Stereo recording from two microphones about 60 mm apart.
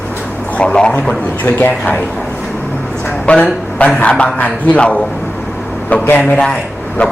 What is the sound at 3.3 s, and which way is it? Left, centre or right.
A woman's voice, centre.